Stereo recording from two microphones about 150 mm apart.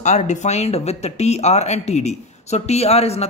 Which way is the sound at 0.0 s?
50° left (ahead or behind).